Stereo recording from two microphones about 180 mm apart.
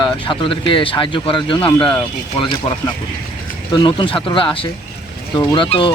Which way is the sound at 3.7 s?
25° left (ahead or behind).